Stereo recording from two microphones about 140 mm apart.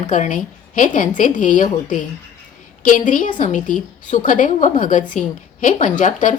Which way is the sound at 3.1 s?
70° left (ahead or behind).